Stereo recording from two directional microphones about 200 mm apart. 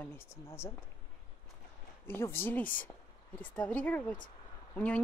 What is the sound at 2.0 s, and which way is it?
A woman's voice, 10° left (ahead or behind).